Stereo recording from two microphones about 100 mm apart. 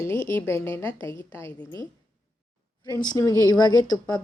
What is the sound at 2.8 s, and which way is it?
A woman's voice, 40° left (ahead or behind).